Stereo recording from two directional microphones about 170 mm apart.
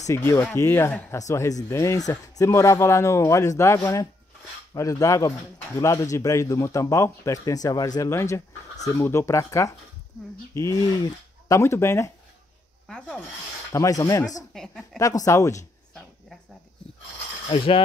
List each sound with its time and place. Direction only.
0.0 s speech: 15° left (ahead or behind)
12.8 s rub: 5° left (ahead or behind)
13.7 s speech: 20° left (ahead or behind)
14.5 s a woman's voice: 5° left (ahead or behind)
15.0 s speech: 20° left (ahead or behind)
17.5 s speech: 30° left (ahead or behind)